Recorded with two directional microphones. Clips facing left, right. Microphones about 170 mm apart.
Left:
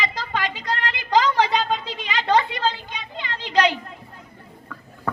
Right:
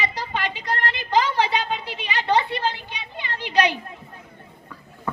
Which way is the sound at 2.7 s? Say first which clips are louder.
Left 2 dB; 15° right (ahead or behind).